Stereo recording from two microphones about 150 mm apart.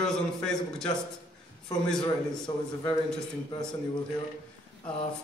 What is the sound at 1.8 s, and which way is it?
Speech, 5° left (ahead or behind).